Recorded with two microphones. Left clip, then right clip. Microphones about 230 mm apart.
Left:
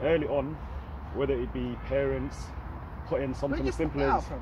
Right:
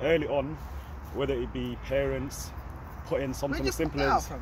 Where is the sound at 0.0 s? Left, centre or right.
Right.